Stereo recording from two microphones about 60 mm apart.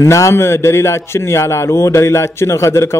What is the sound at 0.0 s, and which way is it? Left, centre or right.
A man's voice, left.